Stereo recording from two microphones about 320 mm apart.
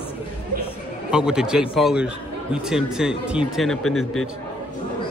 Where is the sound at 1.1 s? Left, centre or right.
Centre.